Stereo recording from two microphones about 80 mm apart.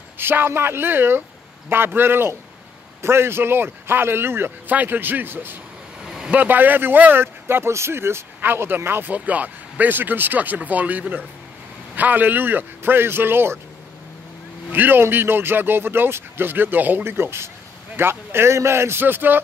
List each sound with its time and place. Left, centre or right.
0.2 s speech: right
6.0 s vehicle: centre
6.3 s speech: right
14.7 s speech: right